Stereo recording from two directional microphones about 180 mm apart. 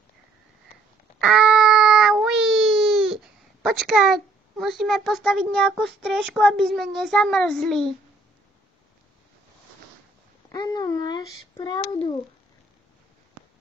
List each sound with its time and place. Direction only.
1.2 s a sound: 5° right (ahead or behind)
3.6 s a child's voice: centre (ahead or behind)
10.5 s a child's voice: 25° left (ahead or behind)